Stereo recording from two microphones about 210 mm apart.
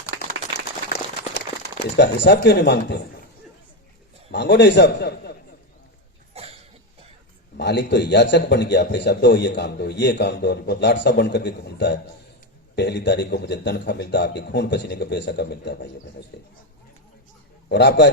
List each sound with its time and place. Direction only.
2.0 s a man's voice: 55° left (ahead or behind)
4.3 s a man's voice: 55° left (ahead or behind)
6.3 s cough: 30° right (ahead or behind)
7.5 s a man's voice: 55° left (ahead or behind)
17.7 s a man's voice: 55° left (ahead or behind)